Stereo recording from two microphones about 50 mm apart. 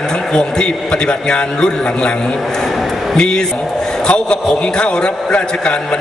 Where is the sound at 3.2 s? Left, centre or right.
Centre.